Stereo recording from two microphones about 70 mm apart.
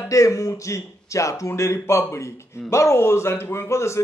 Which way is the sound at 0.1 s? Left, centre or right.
Left.